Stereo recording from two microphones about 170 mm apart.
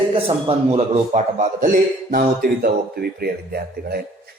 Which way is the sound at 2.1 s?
60° right (ahead or behind).